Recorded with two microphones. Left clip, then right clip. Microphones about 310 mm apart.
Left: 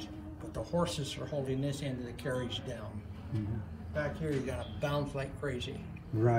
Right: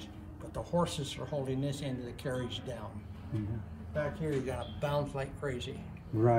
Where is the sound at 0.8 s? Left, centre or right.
Right.